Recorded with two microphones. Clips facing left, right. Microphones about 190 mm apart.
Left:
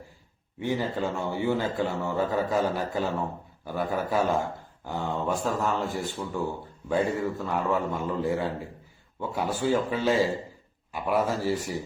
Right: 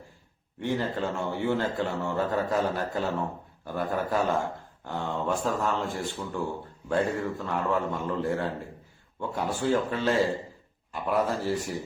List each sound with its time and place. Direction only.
0.6 s a man's voice: 5° left (ahead or behind)